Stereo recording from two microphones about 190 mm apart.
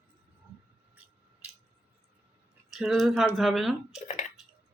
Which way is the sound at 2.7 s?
Centre (ahead or behind).